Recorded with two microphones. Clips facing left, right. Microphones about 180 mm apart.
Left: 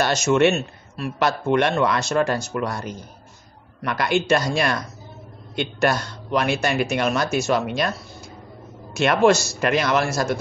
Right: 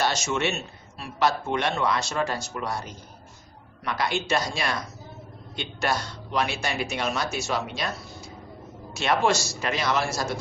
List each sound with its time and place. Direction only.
0.0 s speech: 55° left (ahead or behind)
8.9 s speech: 55° left (ahead or behind)